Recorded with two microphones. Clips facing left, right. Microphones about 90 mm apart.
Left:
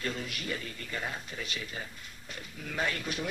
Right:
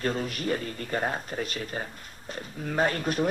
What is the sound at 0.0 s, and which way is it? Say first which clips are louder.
Speech: right 7 dB; 40° right (ahead or behind).